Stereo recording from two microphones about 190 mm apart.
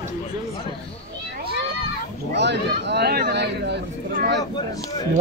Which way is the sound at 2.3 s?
65° right (ahead or behind).